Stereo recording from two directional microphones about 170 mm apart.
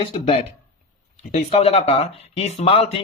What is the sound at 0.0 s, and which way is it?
Speech, 35° left (ahead or behind).